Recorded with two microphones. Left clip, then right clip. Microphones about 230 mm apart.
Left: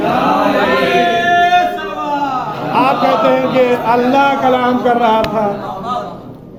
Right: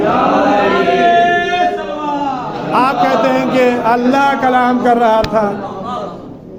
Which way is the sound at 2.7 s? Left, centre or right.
Right.